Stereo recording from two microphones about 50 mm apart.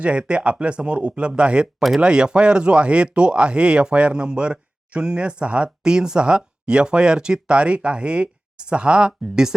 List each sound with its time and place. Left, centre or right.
0.0 s speech: right